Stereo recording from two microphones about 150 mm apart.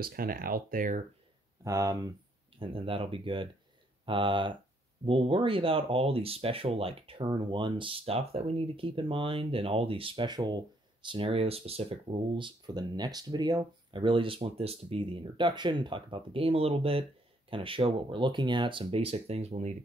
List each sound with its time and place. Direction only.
0.0 s speech: 80° right; by 1.0 s 65° right (ahead or behind)
1.6 s speech: 20° right (ahead or behind)
2.6 s speech: 35° right (ahead or behind)